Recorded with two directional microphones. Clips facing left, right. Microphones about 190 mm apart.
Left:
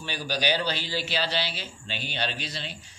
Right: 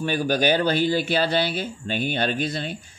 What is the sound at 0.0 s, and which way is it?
Speech, 50° right (ahead or behind).